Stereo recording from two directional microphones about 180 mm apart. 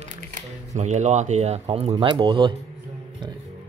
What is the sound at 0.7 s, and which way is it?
Speech, 40° right (ahead or behind).